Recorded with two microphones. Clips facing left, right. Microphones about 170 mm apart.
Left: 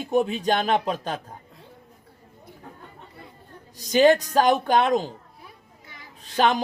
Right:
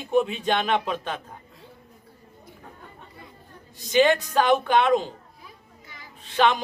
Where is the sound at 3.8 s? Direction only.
40° left (ahead or behind).